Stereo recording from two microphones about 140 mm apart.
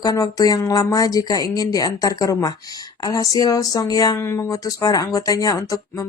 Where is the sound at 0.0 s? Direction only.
25° left (ahead or behind).